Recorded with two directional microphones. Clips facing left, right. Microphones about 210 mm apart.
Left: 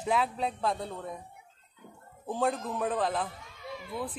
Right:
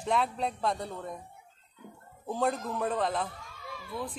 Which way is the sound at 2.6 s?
Centre (ahead or behind).